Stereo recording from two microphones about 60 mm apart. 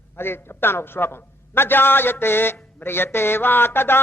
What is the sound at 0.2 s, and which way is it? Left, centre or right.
A man's voice, left.